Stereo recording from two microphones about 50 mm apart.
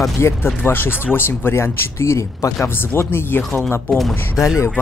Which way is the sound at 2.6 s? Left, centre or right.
Left.